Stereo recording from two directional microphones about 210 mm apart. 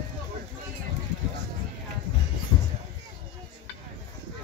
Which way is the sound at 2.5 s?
20° left (ahead or behind).